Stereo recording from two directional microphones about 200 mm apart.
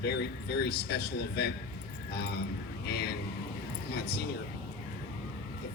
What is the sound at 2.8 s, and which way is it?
Speech, 55° left (ahead or behind).